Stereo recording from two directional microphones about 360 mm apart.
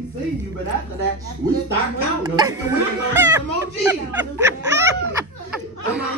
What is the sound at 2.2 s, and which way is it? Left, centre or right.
A woman's voice, centre.